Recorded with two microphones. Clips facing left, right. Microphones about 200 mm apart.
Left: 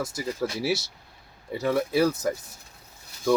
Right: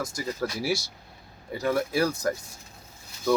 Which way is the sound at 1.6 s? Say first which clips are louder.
Left 2 dB; centre (ahead or behind).